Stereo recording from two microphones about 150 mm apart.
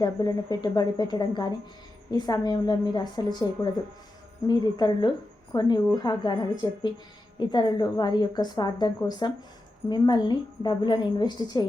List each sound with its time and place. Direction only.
0.0 s a woman's voice: 25° left (ahead or behind)
4.4 s a woman's voice: 30° left (ahead or behind)